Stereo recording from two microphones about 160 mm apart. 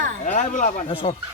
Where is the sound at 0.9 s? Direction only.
35° left (ahead or behind).